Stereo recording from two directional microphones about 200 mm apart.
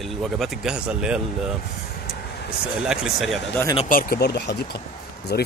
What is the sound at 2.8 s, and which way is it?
Speech, 5° right (ahead or behind).